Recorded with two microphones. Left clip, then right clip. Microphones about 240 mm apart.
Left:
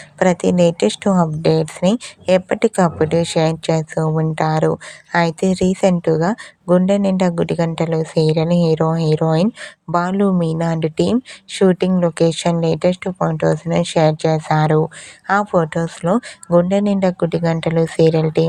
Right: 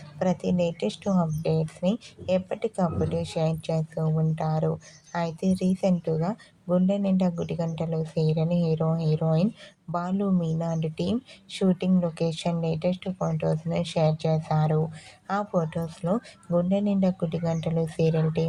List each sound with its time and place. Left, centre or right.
0.2 s speech: left